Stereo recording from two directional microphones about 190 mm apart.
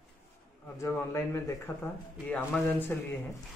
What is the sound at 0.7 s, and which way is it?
A man's voice, 15° left (ahead or behind).